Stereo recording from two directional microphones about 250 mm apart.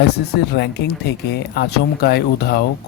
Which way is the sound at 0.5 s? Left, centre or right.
Left.